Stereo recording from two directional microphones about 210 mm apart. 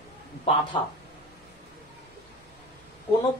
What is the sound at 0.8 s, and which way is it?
Speech, 20° left (ahead or behind).